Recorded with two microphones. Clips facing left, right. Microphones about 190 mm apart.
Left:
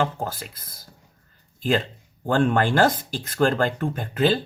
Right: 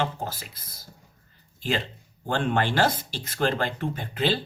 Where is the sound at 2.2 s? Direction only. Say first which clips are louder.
Left 5 dB; 50° left (ahead or behind).